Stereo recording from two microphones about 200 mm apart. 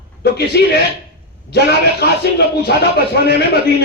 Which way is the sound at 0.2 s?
55° left (ahead or behind).